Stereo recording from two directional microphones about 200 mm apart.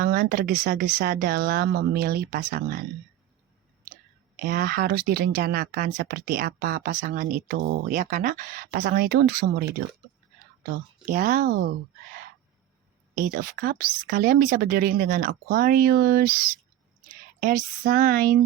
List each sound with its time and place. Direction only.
0.0 s speech: 45° right (ahead or behind)
4.4 s speech: 45° right (ahead or behind)
10.7 s speech: 40° right (ahead or behind)
13.1 s speech: 45° right (ahead or behind)